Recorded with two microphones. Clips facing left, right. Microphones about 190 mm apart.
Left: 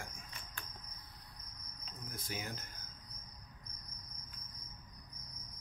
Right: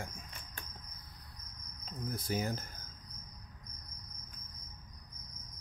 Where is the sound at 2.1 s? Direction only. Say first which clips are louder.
Right 9 dB; 40° right (ahead or behind).